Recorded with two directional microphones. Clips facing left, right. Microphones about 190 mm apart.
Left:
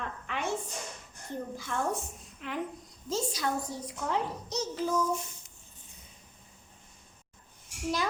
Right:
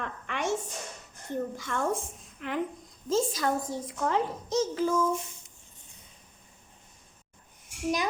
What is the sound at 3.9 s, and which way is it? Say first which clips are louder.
Speech: right 4 dB; 60° right (ahead or behind).